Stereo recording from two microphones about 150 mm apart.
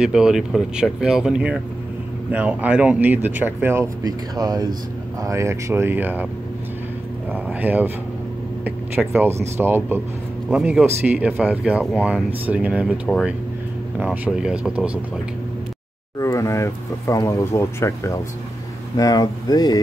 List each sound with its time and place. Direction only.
0.0 s speech: 5° right (ahead or behind)
4.0 s speech: 25° right (ahead or behind)
7.4 s speech: 10° right (ahead or behind)
16.2 s speech: 20° left (ahead or behind)